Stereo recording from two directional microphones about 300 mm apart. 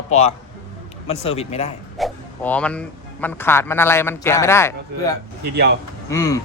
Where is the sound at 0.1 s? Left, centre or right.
Left.